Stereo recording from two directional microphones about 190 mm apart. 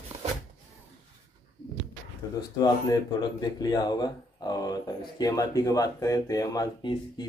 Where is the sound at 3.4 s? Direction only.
20° left (ahead or behind).